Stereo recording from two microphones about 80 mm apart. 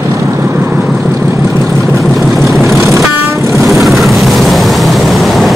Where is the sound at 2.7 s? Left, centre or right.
Right.